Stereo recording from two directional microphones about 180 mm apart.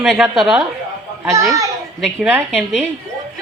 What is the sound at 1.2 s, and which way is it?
Speech, 15° right (ahead or behind).